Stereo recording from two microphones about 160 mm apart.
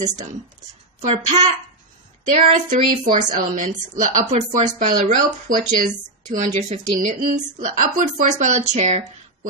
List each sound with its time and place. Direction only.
1.1 s a woman's voice: 45° right (ahead or behind)